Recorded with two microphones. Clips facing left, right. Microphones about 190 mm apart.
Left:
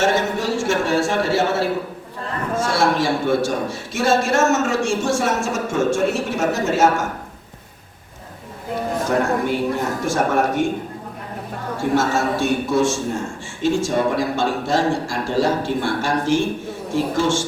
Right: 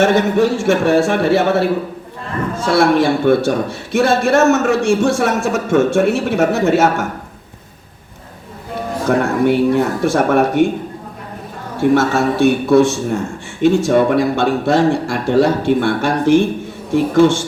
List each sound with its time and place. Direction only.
0.0 s a man's voice: 60° right (ahead or behind)
2.7 s a man's voice: 60° right (ahead or behind)
9.0 s a man's voice: 65° right (ahead or behind)
11.8 s a man's voice: 65° right (ahead or behind)